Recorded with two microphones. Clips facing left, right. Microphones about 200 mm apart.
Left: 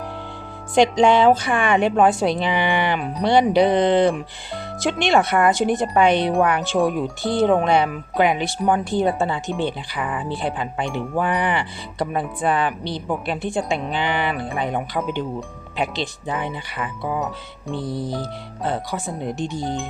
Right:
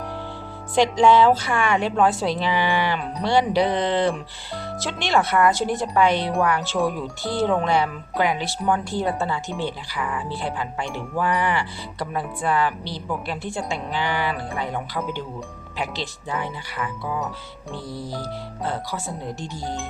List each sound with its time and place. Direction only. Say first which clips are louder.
0.8 s speech: left 1 dB; 20° left (ahead or behind)